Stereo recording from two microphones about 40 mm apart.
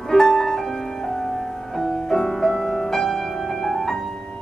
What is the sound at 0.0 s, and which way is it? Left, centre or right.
Music, centre.